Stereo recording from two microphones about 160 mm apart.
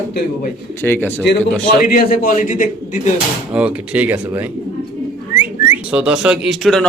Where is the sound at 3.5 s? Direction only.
10° right (ahead or behind).